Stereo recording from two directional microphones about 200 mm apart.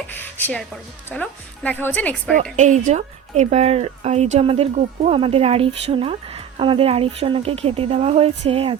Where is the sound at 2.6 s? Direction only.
35° right (ahead or behind).